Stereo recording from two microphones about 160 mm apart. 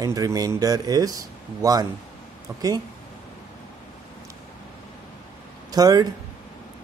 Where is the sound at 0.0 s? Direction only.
20° right (ahead or behind).